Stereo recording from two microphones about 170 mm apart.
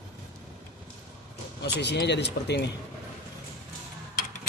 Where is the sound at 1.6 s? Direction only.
85° left.